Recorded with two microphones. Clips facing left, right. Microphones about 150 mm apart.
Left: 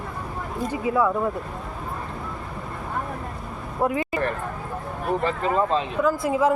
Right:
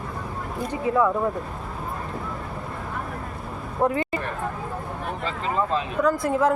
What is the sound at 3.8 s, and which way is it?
Speech, 5° left (ahead or behind).